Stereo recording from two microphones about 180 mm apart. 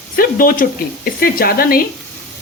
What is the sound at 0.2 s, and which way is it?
Speech, 50° left (ahead or behind).